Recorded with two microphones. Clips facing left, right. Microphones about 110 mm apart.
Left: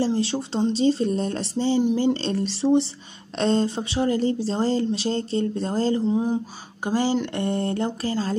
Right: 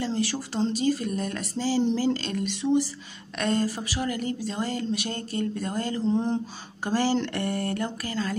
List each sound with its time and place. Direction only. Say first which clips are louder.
0.0 s speech: left 5 dB; 25° left (ahead or behind)
6.0 s speech: left 2 dB; 10° left (ahead or behind); by 8.4 s 30° left (ahead or behind)